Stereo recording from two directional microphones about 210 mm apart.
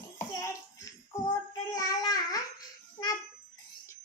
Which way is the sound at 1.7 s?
15° left (ahead or behind).